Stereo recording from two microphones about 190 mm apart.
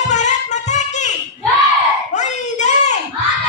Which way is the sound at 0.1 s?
40° left (ahead or behind).